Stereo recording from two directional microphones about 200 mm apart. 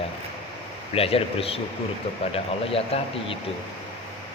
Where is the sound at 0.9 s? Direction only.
30° left (ahead or behind).